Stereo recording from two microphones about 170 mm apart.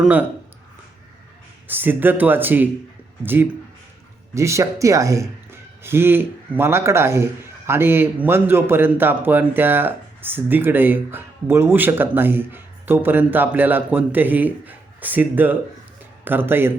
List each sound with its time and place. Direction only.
0.0 s a man's voice: 10° right (ahead or behind)
1.6 s a man's voice: 10° right (ahead or behind)